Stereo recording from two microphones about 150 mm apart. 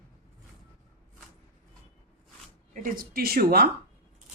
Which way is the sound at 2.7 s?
70° right (ahead or behind).